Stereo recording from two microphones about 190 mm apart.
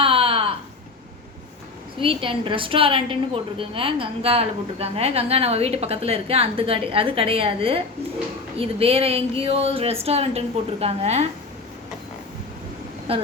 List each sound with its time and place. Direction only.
0.0 s a sound: 30° right (ahead or behind)
2.0 s a woman's voice: 25° right (ahead or behind)
13.1 s a woman's voice: 30° right (ahead or behind)